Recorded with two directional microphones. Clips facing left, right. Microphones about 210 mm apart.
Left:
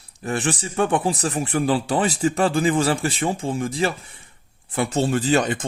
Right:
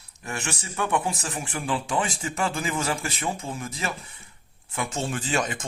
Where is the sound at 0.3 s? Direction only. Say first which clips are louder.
Left 9 dB; 35° left (ahead or behind).